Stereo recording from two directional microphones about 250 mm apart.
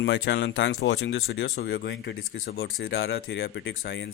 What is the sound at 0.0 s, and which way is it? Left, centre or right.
Speech, left.